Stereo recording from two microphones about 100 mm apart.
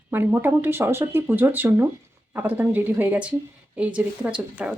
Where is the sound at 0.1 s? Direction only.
20° right (ahead or behind).